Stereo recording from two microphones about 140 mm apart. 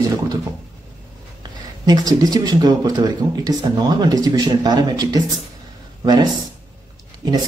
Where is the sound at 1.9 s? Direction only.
25° right (ahead or behind).